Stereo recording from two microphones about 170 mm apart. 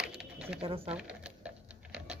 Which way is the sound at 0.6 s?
35° right (ahead or behind).